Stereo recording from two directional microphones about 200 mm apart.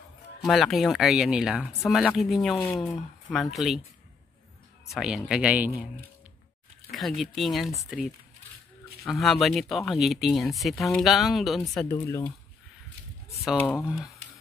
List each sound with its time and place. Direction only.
0.5 s speech: centre (ahead or behind)
4.8 s speech: centre (ahead or behind)
6.9 s speech: centre (ahead or behind)
9.0 s speech: centre (ahead or behind)
13.4 s speech: centre (ahead or behind)